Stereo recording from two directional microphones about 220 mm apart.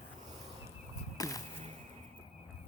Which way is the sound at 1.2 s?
15° left (ahead or behind).